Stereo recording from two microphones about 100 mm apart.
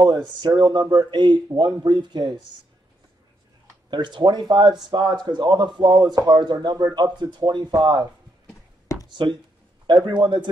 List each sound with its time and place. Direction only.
0.0 s speech: 45° right (ahead or behind)
3.9 s speech: 50° right (ahead or behind)
8.9 s a sound: 35° left (ahead or behind)
10.0 s speech: 50° right (ahead or behind)